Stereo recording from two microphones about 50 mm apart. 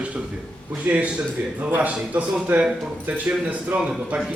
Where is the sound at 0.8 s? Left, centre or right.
Right.